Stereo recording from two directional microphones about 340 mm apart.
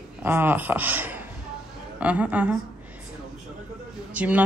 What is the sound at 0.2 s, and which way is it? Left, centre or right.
Speech, centre.